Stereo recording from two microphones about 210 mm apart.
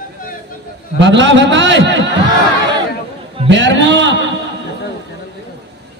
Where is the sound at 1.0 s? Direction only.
60° right (ahead or behind).